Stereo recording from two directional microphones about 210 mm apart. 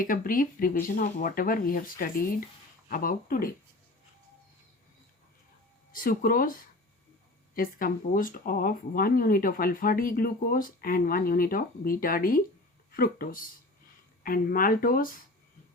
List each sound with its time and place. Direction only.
0.0 s speech: 40° left (ahead or behind)
5.9 s speech: 40° left (ahead or behind)